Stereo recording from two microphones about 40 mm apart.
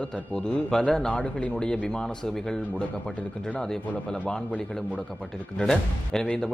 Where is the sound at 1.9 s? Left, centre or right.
Centre.